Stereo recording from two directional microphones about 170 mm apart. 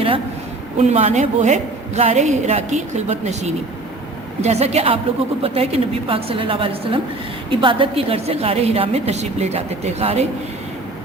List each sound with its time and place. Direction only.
0.8 s a woman's voice: 40° right (ahead or behind)